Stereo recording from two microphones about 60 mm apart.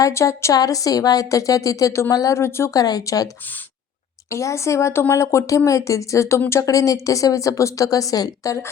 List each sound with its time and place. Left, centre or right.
0.1 s speech: left
0.5 s speech: left
1.9 s speech: left
2.7 s speech: left
4.3 s a woman's voice: left
6.6 s a woman's voice: left